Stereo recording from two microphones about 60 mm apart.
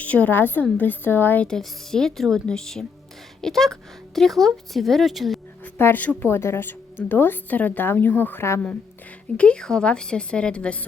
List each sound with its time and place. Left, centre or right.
0.0 s a woman's voice: left
1.5 s a woman's voice: centre
5.6 s speech: left
6.2 s a woman's voice: left
9.4 s a woman's voice: centre